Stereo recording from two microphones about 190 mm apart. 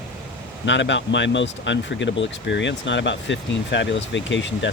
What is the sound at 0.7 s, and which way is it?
Speech, 70° left (ahead or behind).